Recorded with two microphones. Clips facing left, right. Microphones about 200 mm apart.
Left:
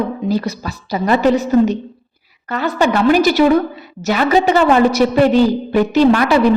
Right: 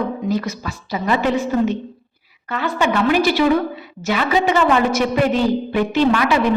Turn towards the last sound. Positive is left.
turn(degrees=35)  # may be behind; listen again after turning